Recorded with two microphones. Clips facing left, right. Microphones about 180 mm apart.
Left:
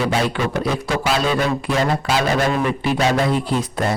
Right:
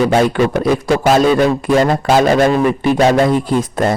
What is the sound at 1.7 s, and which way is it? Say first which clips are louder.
A man's voice: right 8 dB; 50° right (ahead or behind).